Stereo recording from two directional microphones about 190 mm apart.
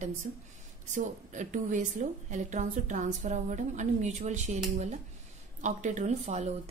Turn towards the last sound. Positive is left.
turn(degrees=-35)  # may be behind; listen again after turning